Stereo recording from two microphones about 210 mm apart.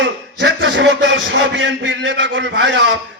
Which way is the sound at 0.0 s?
60° right (ahead or behind).